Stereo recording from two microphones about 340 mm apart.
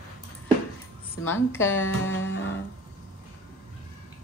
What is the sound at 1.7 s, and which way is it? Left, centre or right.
Music, left.